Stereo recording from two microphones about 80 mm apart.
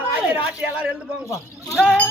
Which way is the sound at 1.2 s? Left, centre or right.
Left.